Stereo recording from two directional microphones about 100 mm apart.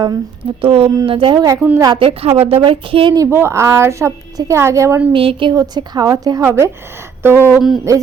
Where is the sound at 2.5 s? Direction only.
65° right (ahead or behind).